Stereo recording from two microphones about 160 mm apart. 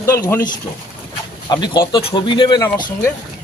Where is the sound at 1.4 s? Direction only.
25° left (ahead or behind).